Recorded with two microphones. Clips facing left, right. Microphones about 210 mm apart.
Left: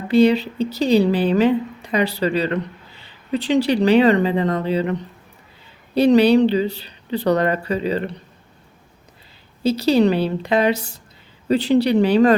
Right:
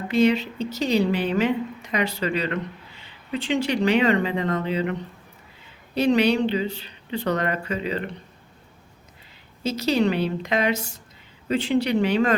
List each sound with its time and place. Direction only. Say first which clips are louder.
0.1 s a woman's voice: left 5 dB; 35° left (ahead or behind)
9.6 s a woman's voice: left 6 dB; 30° left (ahead or behind)